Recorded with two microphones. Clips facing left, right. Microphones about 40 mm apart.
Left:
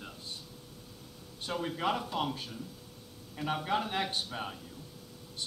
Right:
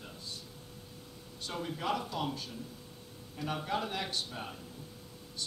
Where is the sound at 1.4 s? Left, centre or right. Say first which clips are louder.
Left 4 dB; left.